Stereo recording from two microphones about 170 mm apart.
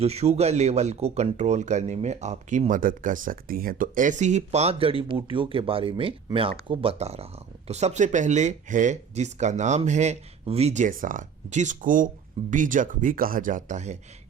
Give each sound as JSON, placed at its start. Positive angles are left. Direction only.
{"t": 0.0, "sound": "speech", "side_deg": -40}